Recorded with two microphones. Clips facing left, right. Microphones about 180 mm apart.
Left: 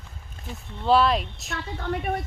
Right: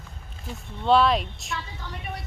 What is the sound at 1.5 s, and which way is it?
Speech, 55° left (ahead or behind).